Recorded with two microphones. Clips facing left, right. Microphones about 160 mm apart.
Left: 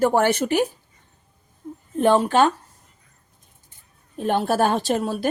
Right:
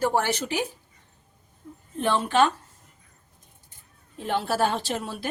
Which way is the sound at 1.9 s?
45° left (ahead or behind).